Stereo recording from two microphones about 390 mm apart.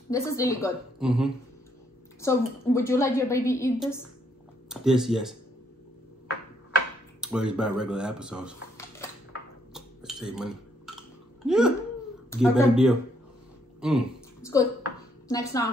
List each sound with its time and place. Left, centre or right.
0.1 s a woman's voice: centre
7.2 s speech: centre
9.8 s a sound: centre
12.3 s speech: centre
13.7 s a sound: centre
15.2 s a woman's voice: centre